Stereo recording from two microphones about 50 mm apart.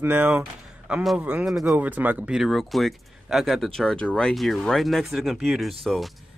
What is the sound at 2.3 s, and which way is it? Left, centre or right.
Speech, centre.